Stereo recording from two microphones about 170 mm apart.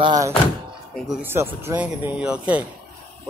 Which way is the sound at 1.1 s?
10° right (ahead or behind).